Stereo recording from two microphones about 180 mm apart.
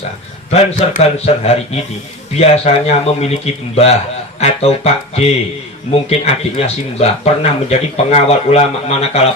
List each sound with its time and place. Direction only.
0.5 s speech: 35° left (ahead or behind)